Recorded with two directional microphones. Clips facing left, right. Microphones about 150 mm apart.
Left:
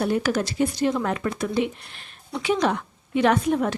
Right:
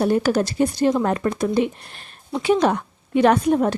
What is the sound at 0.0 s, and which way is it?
A woman's voice, 35° right (ahead or behind).